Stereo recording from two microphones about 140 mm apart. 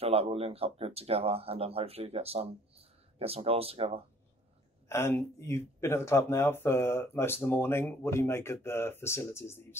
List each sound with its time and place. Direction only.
0.0 s speech: 45° right (ahead or behind)
4.8 s speech: 20° left (ahead or behind)